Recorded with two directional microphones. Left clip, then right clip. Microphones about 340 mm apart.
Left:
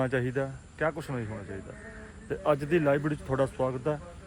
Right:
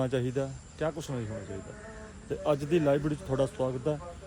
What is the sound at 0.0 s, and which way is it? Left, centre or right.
A man's voice, centre.